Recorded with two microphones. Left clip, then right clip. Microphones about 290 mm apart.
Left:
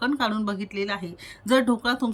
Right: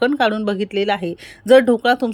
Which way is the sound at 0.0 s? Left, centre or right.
Centre.